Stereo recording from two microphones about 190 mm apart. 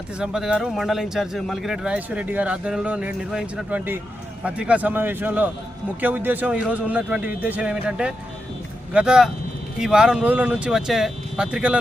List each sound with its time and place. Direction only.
0.2 s a man's voice: 5° right (ahead or behind)